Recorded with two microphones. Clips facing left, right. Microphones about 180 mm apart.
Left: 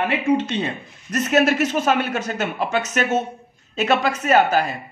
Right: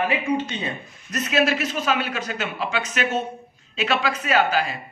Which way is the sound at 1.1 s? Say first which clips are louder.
Left 4 dB; 50° left (ahead or behind).